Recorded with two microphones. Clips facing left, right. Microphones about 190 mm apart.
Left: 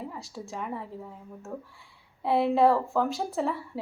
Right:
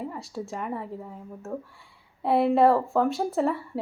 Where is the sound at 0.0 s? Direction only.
Centre (ahead or behind).